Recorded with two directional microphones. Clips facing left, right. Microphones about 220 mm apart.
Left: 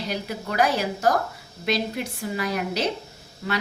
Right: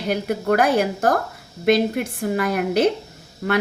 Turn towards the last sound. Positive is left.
turn(degrees=-55)  # may be behind; listen again after turning